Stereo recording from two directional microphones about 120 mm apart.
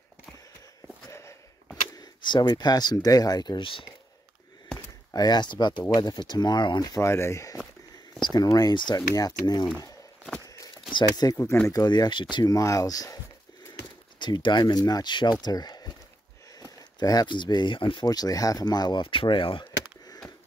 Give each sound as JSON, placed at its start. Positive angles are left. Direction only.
{"t": 2.0, "sound": "speech", "side_deg": 35}
{"t": 4.7, "sound": "speech", "side_deg": 35}
{"t": 8.2, "sound": "speech", "side_deg": 35}
{"t": 10.9, "sound": "speech", "side_deg": 35}
{"t": 11.3, "sound": "speech", "side_deg": 20}
{"t": 14.2, "sound": "speech", "side_deg": 40}
{"t": 17.0, "sound": "speech", "side_deg": 35}